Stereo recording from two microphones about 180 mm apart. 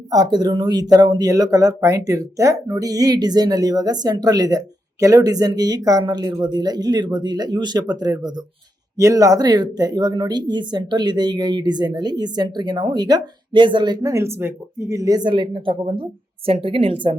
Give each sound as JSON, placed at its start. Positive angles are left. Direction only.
{"t": 0.1, "sound": "a woman's voice", "side_deg": -20}